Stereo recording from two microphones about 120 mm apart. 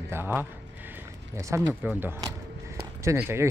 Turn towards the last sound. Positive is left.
turn(degrees=-20)  # may be behind; listen again after turning